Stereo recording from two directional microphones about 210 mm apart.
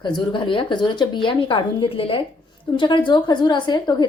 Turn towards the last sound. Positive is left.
turn(degrees=20)  # may be behind; listen again after turning